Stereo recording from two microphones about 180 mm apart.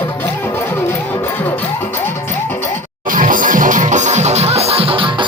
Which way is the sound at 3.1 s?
50° right (ahead or behind).